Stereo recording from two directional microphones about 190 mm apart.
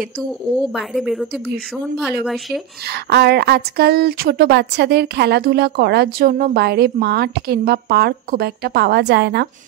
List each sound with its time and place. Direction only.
0.6 s speech: centre (ahead or behind)
2.9 s a woman's voice: 60° right (ahead or behind)